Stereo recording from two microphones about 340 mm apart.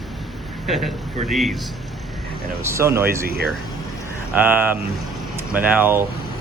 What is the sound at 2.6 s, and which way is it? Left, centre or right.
Speech, centre.